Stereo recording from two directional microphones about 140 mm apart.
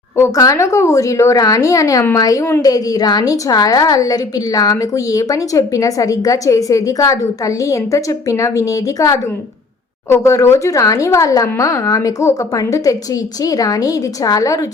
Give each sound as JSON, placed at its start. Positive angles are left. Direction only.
{"t": 0.2, "sound": "a woman's voice", "side_deg": 25}